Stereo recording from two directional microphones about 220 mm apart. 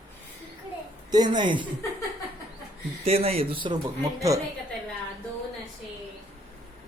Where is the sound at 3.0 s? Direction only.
25° right (ahead or behind).